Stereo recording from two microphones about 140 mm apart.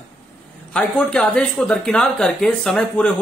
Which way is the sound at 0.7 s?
5° left (ahead or behind).